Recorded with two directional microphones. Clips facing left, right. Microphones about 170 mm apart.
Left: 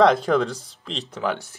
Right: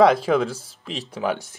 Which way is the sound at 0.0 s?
5° right (ahead or behind).